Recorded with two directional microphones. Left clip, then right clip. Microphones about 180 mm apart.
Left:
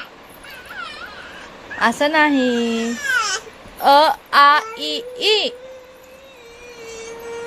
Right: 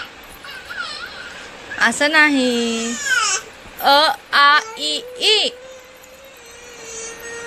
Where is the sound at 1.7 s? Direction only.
10° left (ahead or behind).